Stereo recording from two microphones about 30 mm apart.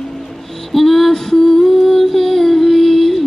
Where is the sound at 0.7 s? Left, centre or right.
Centre.